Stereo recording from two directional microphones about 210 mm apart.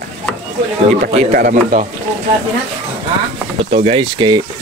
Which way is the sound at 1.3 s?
40° right (ahead or behind).